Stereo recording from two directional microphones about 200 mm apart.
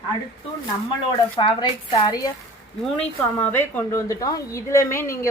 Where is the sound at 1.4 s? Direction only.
20° left (ahead or behind).